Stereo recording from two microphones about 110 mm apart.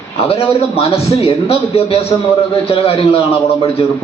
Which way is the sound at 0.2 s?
65° left (ahead or behind).